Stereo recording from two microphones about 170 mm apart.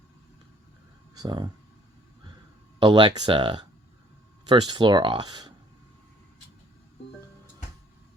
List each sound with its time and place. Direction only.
1.1 s speech: 25° right (ahead or behind)
2.7 s speech: 25° right (ahead or behind)